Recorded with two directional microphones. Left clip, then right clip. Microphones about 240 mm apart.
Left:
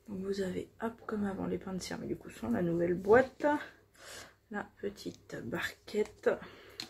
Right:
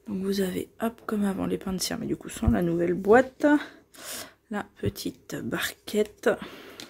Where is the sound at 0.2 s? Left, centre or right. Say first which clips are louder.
Right 7 dB; right.